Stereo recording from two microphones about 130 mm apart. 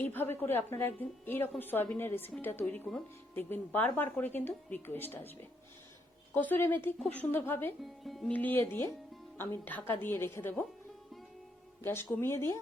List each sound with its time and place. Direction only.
0.0 s a woman's voice: 15° left (ahead or behind)
7.8 s speech: centre (ahead or behind)
8.3 s a woman's voice: 15° left (ahead or behind)
11.8 s speech: 15° left (ahead or behind)